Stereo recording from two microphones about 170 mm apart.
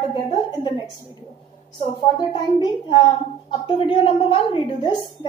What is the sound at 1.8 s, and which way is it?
A woman's voice, 25° left (ahead or behind).